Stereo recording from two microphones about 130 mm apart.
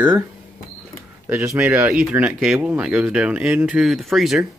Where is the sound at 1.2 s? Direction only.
20° right (ahead or behind).